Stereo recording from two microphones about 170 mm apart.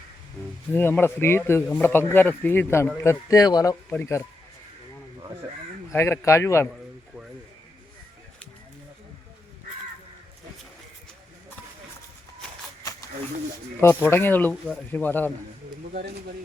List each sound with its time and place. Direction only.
0.7 s speech: 10° left (ahead or behind)
5.9 s speech: 15° left (ahead or behind)
13.8 s speech: 15° left (ahead or behind)
15.9 s speech: 60° right (ahead or behind)